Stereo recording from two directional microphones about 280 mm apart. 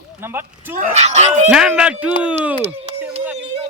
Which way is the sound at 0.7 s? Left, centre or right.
Right.